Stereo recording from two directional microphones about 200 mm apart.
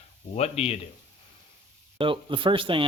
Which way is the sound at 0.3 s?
30° left (ahead or behind).